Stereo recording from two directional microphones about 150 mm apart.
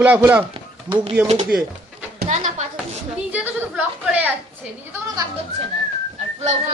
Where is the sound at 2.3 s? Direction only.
55° right (ahead or behind).